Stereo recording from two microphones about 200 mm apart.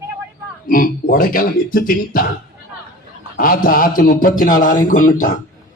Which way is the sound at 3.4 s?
45° left (ahead or behind).